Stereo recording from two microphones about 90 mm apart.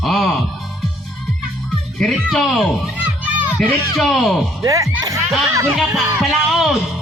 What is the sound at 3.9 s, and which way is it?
Speech, centre (ahead or behind).